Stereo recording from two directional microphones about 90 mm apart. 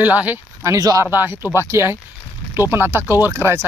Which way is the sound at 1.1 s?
25° right (ahead or behind).